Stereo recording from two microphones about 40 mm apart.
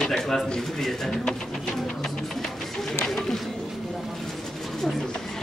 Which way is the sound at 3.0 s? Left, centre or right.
Centre.